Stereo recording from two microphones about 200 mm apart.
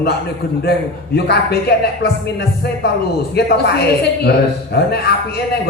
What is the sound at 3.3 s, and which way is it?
Speech, 55° left (ahead or behind).